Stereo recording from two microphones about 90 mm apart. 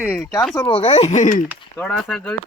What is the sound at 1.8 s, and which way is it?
Speech, 10° left (ahead or behind).